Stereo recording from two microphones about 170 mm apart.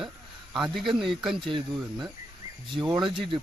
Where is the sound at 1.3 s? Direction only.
30° right (ahead or behind).